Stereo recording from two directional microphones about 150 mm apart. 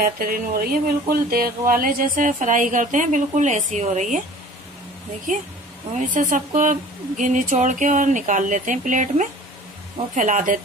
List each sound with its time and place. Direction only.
0.0 s speech: 75° right (ahead or behind); by 4.2 s 55° right (ahead or behind)
5.9 s speech: 60° right (ahead or behind)